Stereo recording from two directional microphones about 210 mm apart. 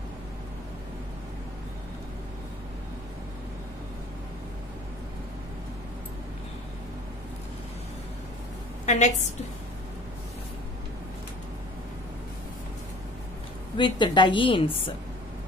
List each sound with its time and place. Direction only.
8.9 s a woman's voice: 35° left (ahead or behind)
13.7 s a woman's voice: 20° left (ahead or behind)